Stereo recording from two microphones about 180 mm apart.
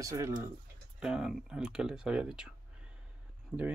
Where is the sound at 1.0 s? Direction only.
5° right (ahead or behind).